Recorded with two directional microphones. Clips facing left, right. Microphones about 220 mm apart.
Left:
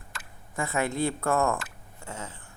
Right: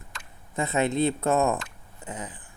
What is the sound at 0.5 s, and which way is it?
Speech, 20° right (ahead or behind).